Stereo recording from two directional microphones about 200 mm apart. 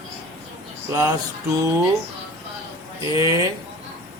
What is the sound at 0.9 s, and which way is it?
Speech, 15° right (ahead or behind).